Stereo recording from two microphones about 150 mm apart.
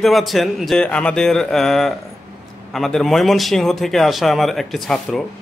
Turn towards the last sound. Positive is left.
turn(degrees=0)  # may be behind; listen again after turning